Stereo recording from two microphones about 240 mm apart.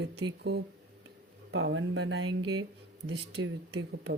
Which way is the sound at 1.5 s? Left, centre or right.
Right.